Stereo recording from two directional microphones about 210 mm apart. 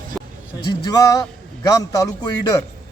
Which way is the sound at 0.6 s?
20° left (ahead or behind).